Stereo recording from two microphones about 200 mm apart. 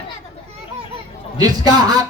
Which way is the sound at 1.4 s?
20° right (ahead or behind).